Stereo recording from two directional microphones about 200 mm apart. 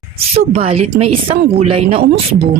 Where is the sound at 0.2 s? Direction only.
30° right (ahead or behind).